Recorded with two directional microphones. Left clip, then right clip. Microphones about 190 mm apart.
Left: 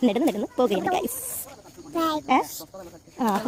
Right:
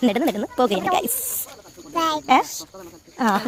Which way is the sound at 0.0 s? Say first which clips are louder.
Right 2 dB; 10° left (ahead or behind).